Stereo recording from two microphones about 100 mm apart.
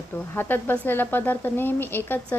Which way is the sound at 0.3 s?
20° left (ahead or behind).